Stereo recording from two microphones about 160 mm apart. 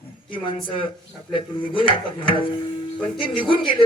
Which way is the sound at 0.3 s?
35° left (ahead or behind).